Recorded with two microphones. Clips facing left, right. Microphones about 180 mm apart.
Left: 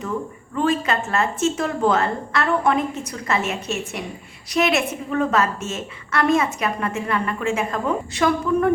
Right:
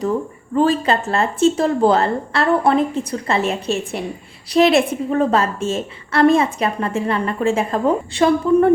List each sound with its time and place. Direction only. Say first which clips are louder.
0.5 s a woman's voice: right 5 dB; 35° right (ahead or behind)